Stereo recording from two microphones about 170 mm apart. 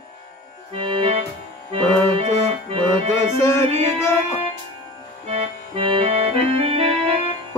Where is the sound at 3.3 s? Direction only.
15° left (ahead or behind).